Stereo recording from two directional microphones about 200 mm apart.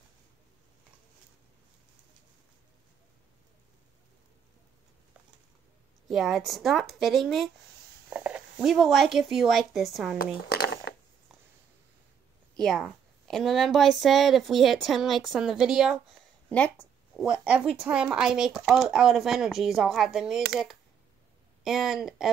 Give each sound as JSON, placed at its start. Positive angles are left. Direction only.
{"t": 6.0, "sound": "a woman's voice", "side_deg": 0}
{"t": 10.1, "sound": "a sound", "side_deg": 50}
{"t": 12.5, "sound": "a woman's voice", "side_deg": 0}
{"t": 16.4, "sound": "a woman's voice", "side_deg": 5}
{"t": 17.2, "sound": "a woman's voice", "side_deg": -5}
{"t": 21.6, "sound": "a woman's voice", "side_deg": 0}